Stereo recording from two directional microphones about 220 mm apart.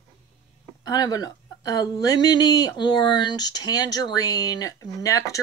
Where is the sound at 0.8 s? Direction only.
15° left (ahead or behind).